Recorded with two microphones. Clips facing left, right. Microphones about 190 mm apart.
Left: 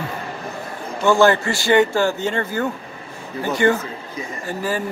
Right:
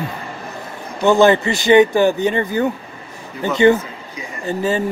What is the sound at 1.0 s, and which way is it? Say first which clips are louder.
Speech: right 3 dB; 20° right (ahead or behind).